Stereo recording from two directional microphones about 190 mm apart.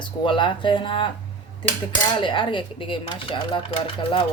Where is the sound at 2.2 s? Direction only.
25° left (ahead or behind).